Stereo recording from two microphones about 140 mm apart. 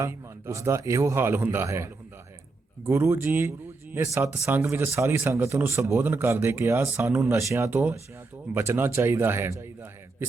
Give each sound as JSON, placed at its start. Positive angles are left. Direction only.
{"t": 0.0, "sound": "a man's voice", "side_deg": -20}